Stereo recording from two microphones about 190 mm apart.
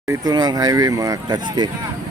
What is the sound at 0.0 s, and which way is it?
Speech, 20° right (ahead or behind).